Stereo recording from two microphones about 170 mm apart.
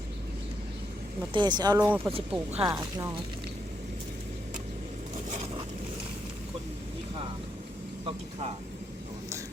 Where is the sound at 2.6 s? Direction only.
25° right (ahead or behind).